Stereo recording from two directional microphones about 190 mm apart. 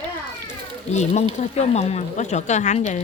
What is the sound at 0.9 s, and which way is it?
Speech, 35° left (ahead or behind).